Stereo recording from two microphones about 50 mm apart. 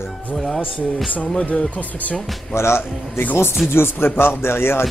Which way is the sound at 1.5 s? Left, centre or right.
Left.